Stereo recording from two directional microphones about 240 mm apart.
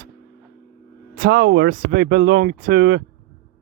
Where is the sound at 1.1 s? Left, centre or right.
Right.